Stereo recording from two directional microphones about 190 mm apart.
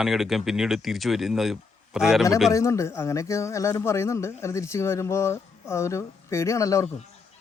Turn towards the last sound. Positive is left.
turn(degrees=15)  # may be behind; listen again after turning